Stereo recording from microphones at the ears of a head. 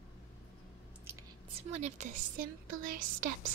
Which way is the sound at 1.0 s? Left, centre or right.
Right.